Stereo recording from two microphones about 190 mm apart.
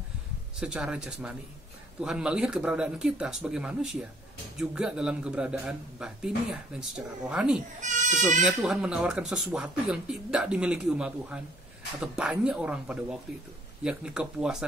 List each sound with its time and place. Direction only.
0.6 s speech: 5° right (ahead or behind)
7.8 s speech: 40° right (ahead or behind)
8.4 s speech: 5° right (ahead or behind)